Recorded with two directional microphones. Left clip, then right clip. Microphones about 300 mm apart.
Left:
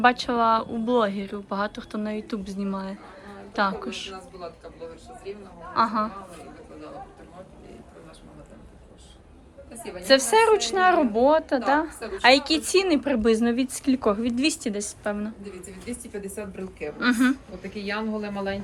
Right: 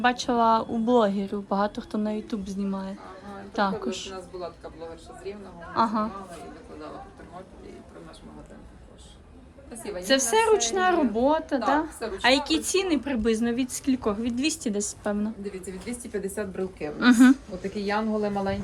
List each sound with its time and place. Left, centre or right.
0.0 s a woman's voice: centre
5.7 s a woman's voice: centre
10.0 s a woman's voice: centre
15.9 s speech: right
17.0 s a woman's voice: centre
17.7 s speech: right